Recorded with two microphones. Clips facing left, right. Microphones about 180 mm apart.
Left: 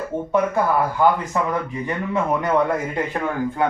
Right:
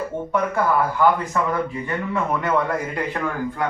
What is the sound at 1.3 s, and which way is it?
Speech, 20° left (ahead or behind).